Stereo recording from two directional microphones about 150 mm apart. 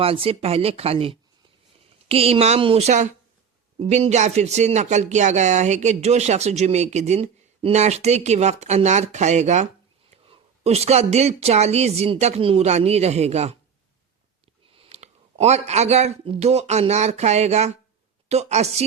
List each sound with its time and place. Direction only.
0.0 s speech: 40° right (ahead or behind)
14.7 s speech: 40° right (ahead or behind)